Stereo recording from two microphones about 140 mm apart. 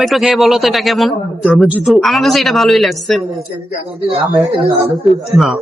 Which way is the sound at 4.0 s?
45° right (ahead or behind).